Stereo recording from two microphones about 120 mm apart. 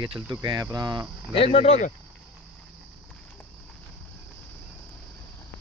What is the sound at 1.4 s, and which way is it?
Speech, 55° left (ahead or behind).